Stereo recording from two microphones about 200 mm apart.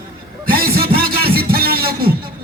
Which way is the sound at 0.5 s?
50° right (ahead or behind).